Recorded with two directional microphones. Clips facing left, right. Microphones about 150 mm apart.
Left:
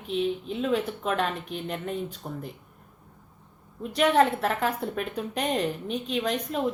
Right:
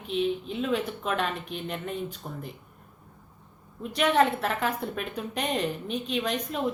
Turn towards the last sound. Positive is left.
turn(degrees=35)  # may be behind; listen again after turning